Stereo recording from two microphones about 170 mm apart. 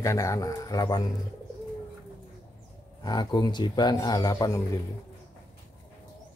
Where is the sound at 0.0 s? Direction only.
20° left (ahead or behind).